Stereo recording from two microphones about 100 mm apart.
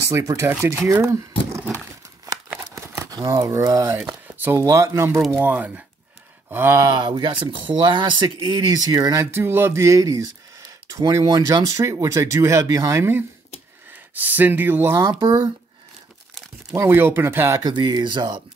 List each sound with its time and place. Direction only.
0.0 s speech: 30° right (ahead or behind)
3.1 s speech: 35° right (ahead or behind)
3.9 s speech: 25° right (ahead or behind)
6.8 s speech: 50° right (ahead or behind)
9.2 s speech: 25° right (ahead or behind)
16.7 s speech: 25° right (ahead or behind)
17.6 s speech: 50° right (ahead or behind)